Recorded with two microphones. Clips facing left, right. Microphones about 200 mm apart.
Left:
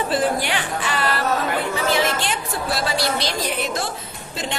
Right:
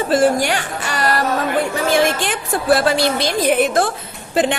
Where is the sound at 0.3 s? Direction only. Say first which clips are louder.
Right 4 dB; 45° right (ahead or behind).